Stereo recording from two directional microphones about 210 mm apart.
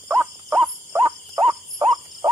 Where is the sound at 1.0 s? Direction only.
25° right (ahead or behind).